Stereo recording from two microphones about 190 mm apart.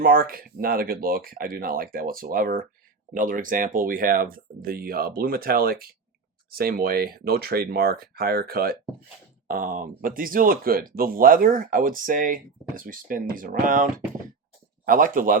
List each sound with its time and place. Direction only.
0.0 s speech: 50° right (ahead or behind)